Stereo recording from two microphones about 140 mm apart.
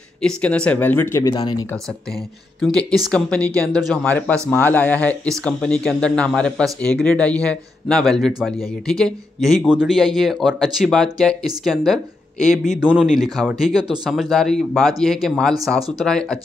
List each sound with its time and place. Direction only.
0.2 s speech: 5° left (ahead or behind)
1.3 s speech: 30° left (ahead or behind)
2.6 s speech: centre (ahead or behind)